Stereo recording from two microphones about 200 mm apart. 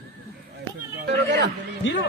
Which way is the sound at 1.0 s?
60° right (ahead or behind).